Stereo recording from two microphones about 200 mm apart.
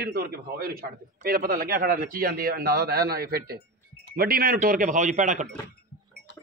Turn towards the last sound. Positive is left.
turn(degrees=-40)  # may be behind; listen again after turning